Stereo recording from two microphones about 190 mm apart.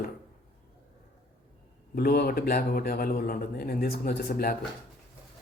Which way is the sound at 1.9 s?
55° left (ahead or behind).